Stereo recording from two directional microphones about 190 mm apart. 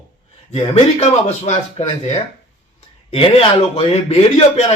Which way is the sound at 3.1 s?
30° left (ahead or behind).